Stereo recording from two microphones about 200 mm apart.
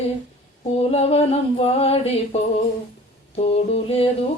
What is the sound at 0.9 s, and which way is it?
Mantra, 30° left (ahead or behind).